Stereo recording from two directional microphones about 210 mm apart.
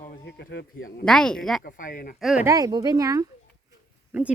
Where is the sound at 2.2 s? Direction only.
Centre (ahead or behind).